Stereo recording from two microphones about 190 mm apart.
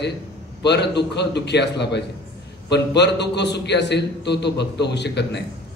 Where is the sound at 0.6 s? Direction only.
65° left (ahead or behind).